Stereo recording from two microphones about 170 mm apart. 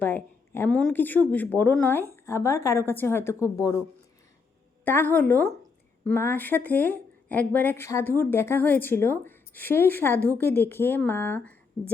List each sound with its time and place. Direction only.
0.0 s a woman's voice: 10° left (ahead or behind)
4.9 s speech: 10° left (ahead or behind)